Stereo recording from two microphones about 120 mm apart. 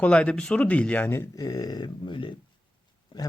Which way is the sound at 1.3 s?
30° left (ahead or behind).